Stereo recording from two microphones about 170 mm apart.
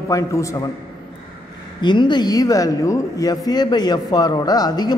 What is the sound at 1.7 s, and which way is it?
Speech, 25° left (ahead or behind).